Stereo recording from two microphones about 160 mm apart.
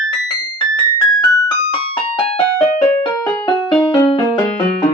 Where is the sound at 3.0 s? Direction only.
25° left (ahead or behind).